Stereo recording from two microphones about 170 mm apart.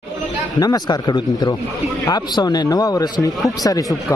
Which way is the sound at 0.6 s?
25° left (ahead or behind).